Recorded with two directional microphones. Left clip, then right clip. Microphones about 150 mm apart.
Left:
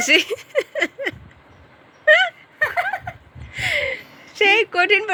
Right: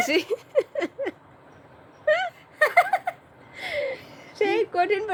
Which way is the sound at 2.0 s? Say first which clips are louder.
Left 9 dB; centre (ahead or behind).